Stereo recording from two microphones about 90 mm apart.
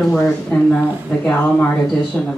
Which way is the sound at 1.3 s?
20° left (ahead or behind).